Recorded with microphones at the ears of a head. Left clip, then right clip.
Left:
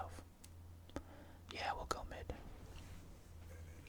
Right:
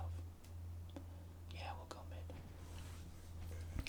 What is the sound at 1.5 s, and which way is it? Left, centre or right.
Speech, left.